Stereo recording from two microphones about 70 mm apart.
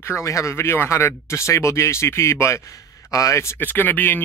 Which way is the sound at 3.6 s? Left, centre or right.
Left.